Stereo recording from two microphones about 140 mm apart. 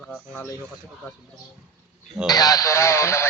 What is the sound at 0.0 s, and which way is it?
Speech, 5° left (ahead or behind).